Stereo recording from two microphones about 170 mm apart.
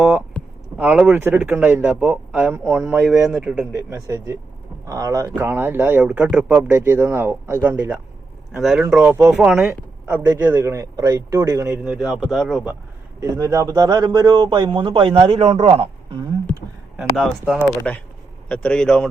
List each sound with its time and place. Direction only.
0.8 s speech: 5° right (ahead or behind)
4.9 s a man's voice: 20° right (ahead or behind); by 12.7 s centre (ahead or behind)
13.1 s a man's voice: 15° right (ahead or behind); by 16.2 s 35° right (ahead or behind)
17.0 s speech: 5° right (ahead or behind)
18.4 s speech: 5° left (ahead or behind)